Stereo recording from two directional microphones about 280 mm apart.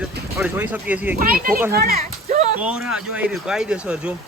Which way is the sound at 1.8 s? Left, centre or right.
Right.